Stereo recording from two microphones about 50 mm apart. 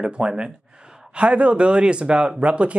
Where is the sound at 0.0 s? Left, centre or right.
Centre.